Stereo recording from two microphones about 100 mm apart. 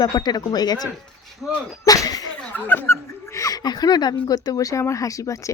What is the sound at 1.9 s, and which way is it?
Speech, 40° left (ahead or behind).